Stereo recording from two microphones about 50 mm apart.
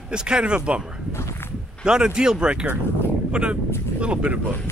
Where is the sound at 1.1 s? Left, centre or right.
Left.